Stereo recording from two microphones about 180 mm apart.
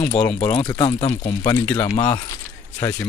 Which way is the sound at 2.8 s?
15° left (ahead or behind).